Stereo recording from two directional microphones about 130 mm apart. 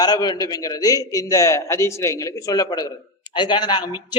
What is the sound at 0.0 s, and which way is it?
A man's voice, 30° left (ahead or behind).